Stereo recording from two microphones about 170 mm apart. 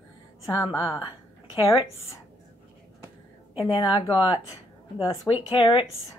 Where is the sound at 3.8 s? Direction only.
30° left (ahead or behind).